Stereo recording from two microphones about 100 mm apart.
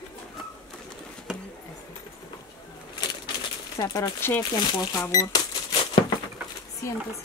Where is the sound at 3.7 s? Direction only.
40° left (ahead or behind).